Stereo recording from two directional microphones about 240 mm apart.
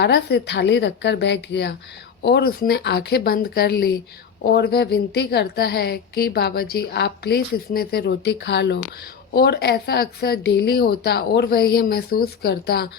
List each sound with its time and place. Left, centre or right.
0.0 s a woman's voice: left